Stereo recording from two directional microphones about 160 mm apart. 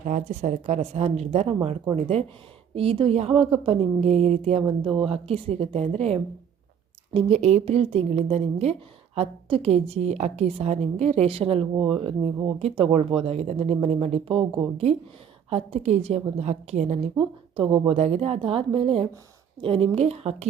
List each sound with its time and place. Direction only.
0.0 s a woman's voice: 50° right (ahead or behind)
4.8 s a woman's voice: 30° right (ahead or behind)
17.2 s a woman's voice: 35° right (ahead or behind)